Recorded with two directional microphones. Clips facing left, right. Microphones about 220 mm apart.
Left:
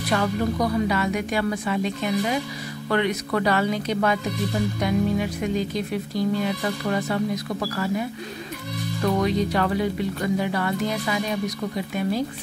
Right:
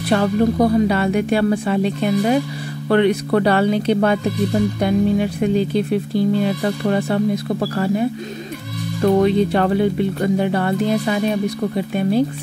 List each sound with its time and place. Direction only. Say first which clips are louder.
0.1 s speech: right 7 dB; 30° right (ahead or behind)